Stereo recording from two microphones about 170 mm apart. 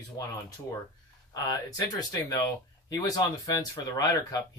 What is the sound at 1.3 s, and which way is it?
Speech, 25° left (ahead or behind).